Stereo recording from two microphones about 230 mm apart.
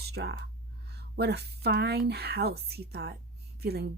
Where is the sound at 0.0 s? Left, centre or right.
Right.